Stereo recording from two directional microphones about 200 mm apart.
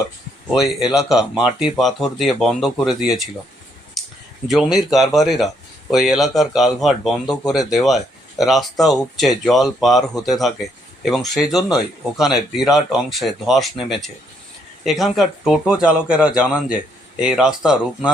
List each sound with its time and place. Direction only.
0.4 s speech: centre (ahead or behind)
4.0 s a sound: centre (ahead or behind)
4.4 s speech: centre (ahead or behind)
14.8 s speech: centre (ahead or behind)